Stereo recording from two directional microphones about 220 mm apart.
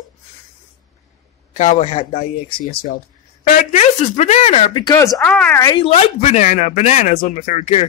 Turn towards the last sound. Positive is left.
turn(degrees=30)  # may be behind; listen again after turning